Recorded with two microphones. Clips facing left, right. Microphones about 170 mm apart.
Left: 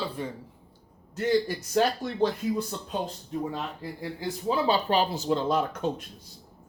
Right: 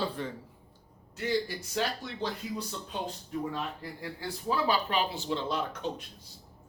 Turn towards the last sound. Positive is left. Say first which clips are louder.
# left 6 dB
turn(degrees=50)  # may be behind; listen again after turning